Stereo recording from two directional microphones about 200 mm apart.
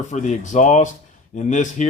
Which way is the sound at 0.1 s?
40° left (ahead or behind).